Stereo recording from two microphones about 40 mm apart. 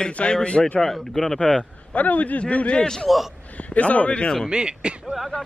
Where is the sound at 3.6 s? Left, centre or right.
Left.